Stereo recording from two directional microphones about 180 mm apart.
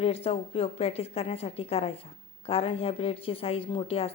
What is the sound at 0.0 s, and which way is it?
Speech, 35° left (ahead or behind).